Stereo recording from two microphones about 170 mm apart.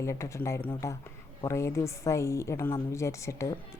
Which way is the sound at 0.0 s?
15° left (ahead or behind).